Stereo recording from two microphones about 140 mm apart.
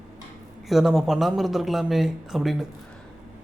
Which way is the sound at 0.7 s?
Centre (ahead or behind).